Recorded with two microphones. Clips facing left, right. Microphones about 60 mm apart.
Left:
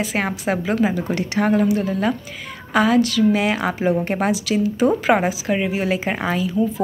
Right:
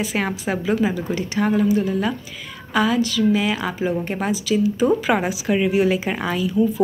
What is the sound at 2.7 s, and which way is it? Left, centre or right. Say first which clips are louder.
Speech: left 3 dB; left.